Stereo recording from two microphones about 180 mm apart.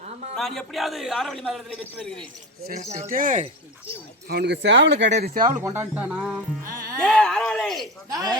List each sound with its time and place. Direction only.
0.3 s a man's voice: centre (ahead or behind)
2.9 s speech: 45° right (ahead or behind)
4.3 s speech: 65° right (ahead or behind)
5.2 s speech: 50° right (ahead or behind)
5.6 s music: 10° right (ahead or behind)
7.0 s a man's voice: centre (ahead or behind)
8.1 s speech: 20° right (ahead or behind)